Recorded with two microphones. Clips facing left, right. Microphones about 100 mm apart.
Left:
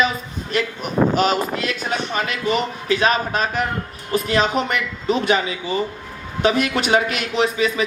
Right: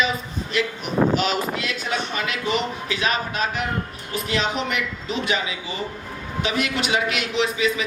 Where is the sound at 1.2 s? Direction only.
45° left (ahead or behind).